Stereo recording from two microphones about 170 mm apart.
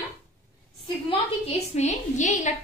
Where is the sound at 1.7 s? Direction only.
40° left (ahead or behind).